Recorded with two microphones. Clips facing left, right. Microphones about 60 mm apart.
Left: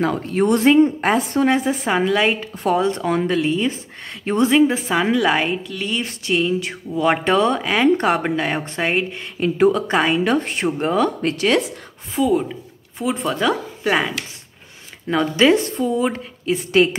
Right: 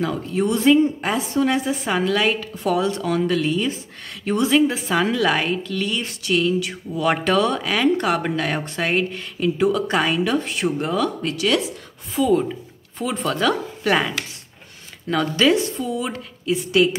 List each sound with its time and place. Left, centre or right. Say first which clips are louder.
0.0 s speech: left 3 dB; left
1.4 s speech: left 3 dB; left
5.6 s speech: right 3 dB; centre
5.9 s speech: left 5 dB; left
12.2 s a woman's voice: even; centre; by 16.9 s left